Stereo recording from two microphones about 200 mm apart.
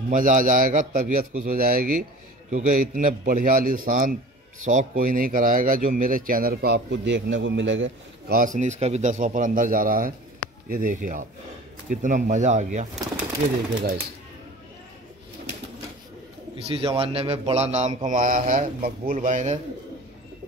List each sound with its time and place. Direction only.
0.1 s a man's voice: 40° right (ahead or behind); by 7.9 s 70° right (ahead or behind)
8.3 s a man's voice: 40° right (ahead or behind)
16.6 s a man's voice: 30° right (ahead or behind)